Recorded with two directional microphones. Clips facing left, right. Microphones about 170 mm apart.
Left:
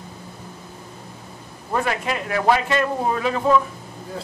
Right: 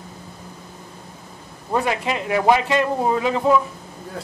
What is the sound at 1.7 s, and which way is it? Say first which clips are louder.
Speech: right 2 dB; 15° right (ahead or behind).